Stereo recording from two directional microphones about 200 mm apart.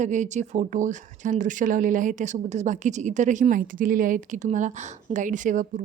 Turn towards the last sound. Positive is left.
turn(degrees=-40)  # may be behind; listen again after turning